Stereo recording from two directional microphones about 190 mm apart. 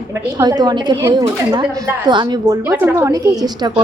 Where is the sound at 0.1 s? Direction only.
15° right (ahead or behind).